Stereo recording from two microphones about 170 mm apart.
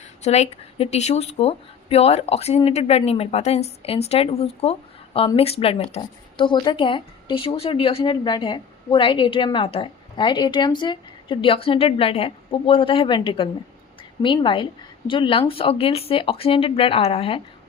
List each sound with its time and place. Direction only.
0.0 s speech: 40° left (ahead or behind)